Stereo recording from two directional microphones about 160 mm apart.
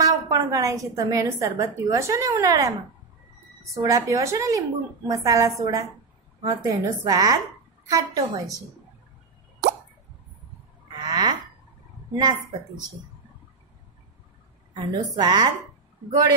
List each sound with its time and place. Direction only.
0.0 s a woman's voice: 25° right (ahead or behind)
3.7 s a woman's voice: 20° right (ahead or behind)
11.0 s a sound: 25° right (ahead or behind)
14.7 s a woman's voice: 25° right (ahead or behind)